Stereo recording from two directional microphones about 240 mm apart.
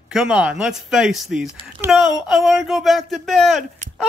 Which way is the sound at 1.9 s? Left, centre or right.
Centre.